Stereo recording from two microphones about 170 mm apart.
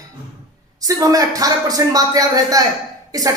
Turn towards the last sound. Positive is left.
turn(degrees=-20)  # may be behind; listen again after turning